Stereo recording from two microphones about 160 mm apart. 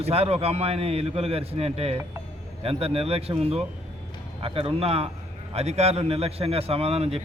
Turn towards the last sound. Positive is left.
turn(degrees=-40)  # may be behind; listen again after turning